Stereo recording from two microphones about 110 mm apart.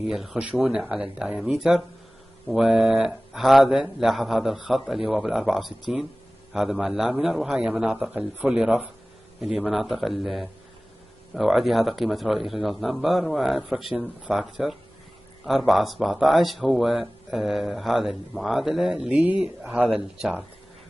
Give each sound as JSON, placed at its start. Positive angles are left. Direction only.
{"t": 0.0, "sound": "speech", "side_deg": -5}